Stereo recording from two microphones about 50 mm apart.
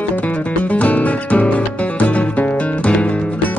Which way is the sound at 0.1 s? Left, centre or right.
Left.